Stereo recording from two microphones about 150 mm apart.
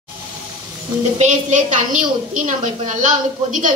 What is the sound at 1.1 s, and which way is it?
A woman's voice, 55° right (ahead or behind).